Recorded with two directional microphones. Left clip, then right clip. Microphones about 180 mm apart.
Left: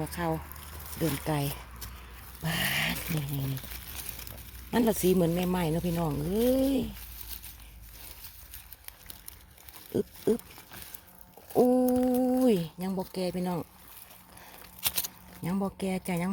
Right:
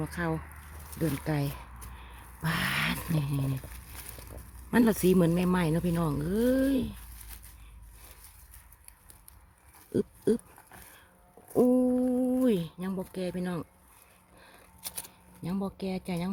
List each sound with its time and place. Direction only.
0.0 s speech: 15° right (ahead or behind)
2.4 s dog: 20° right (ahead or behind)
4.7 s speech: 30° right (ahead or behind)
9.9 s pig: 25° right (ahead or behind)
11.5 s speech: 20° right (ahead or behind)
11.9 s speech: 5° right (ahead or behind)
14.8 s a sound: 20° left (ahead or behind)
15.4 s speech: 5° left (ahead or behind)